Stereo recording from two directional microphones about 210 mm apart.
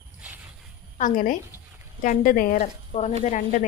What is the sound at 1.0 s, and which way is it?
Speech, 40° left (ahead or behind).